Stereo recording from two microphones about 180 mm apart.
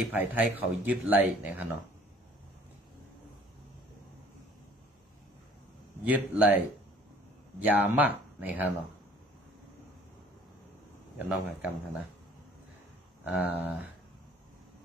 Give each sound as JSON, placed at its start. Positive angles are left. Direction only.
{"t": 0.1, "sound": "speech", "side_deg": -10}
{"t": 6.0, "sound": "speech", "side_deg": -10}
{"t": 7.6, "sound": "speech", "side_deg": -10}
{"t": 11.1, "sound": "speech", "side_deg": -10}
{"t": 13.2, "sound": "speech", "side_deg": -10}